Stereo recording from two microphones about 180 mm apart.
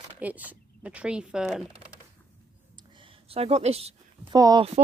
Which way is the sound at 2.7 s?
25° right (ahead or behind).